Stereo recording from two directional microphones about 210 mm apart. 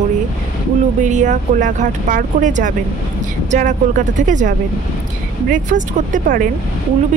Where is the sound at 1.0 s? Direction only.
35° right (ahead or behind).